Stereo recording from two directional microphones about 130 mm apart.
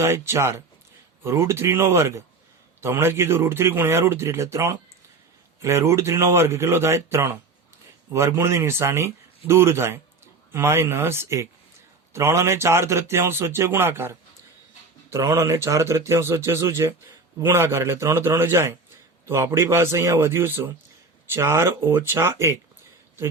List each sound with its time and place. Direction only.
0.0 s a man's voice: 20° right (ahead or behind)